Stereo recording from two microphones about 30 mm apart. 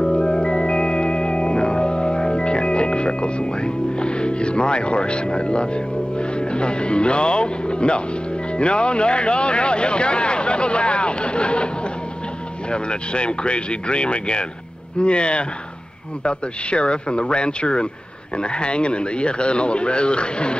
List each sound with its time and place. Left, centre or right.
0.0 s music: left
6.1 s speech: left
12.7 s speech: left